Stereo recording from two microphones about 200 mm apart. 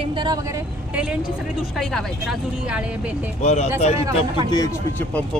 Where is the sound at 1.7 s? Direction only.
Centre (ahead or behind).